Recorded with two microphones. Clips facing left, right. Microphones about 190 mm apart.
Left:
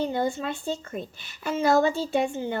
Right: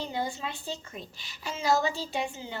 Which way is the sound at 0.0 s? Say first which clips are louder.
Left 7 dB; 55° left (ahead or behind).